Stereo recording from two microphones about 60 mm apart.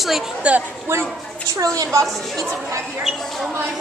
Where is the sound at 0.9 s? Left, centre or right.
Right.